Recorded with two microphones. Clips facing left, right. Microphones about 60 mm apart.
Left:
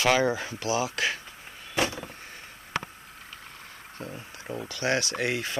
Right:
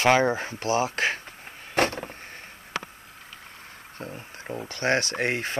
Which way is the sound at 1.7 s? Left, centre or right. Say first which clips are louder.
Right 4 dB; right.